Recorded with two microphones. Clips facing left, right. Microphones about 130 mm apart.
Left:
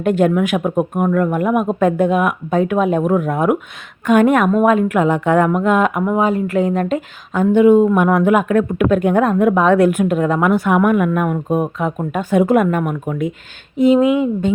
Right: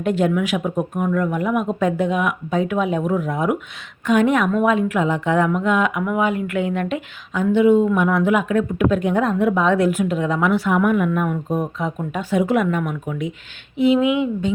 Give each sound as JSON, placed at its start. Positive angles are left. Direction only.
{"t": 0.0, "sound": "a woman's voice", "side_deg": 50}